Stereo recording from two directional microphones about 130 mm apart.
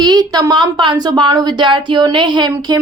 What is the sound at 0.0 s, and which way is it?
Speech, 30° right (ahead or behind).